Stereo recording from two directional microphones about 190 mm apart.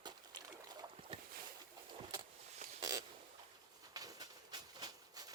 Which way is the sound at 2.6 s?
40° right (ahead or behind).